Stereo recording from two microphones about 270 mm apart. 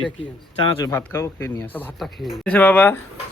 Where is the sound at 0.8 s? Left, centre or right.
Centre.